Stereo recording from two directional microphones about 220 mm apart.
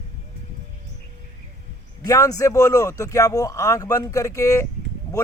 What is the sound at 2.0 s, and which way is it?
Speech, 15° left (ahead or behind).